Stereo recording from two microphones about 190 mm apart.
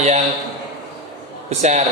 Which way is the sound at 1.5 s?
35° right (ahead or behind).